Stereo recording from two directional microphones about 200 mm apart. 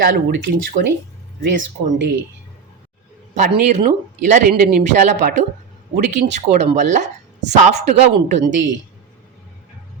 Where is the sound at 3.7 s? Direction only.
35° right (ahead or behind).